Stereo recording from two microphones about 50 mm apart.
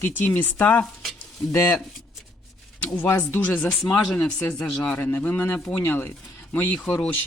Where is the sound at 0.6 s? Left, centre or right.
Left.